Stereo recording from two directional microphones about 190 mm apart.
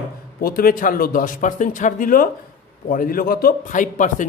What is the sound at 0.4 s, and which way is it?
A man's voice, 50° left (ahead or behind).